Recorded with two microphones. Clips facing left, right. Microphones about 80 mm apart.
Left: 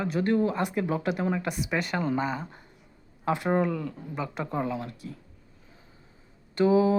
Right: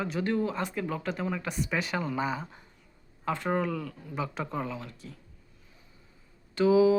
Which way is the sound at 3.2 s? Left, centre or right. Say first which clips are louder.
Left 4 dB; centre.